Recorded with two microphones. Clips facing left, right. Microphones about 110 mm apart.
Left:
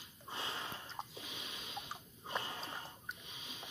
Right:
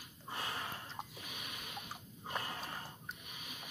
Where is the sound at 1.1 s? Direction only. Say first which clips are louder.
Even; 25° left (ahead or behind).